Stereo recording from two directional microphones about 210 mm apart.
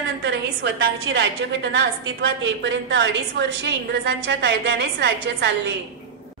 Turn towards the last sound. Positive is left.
turn(degrees=-50)  # may be behind; listen again after turning